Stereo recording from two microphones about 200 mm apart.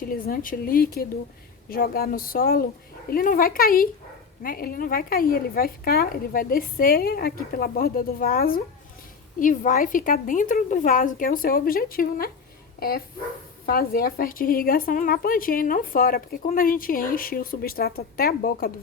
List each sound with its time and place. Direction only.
0.1 s a woman's voice: 45° left (ahead or behind)
13.7 s a woman's voice: 50° left (ahead or behind)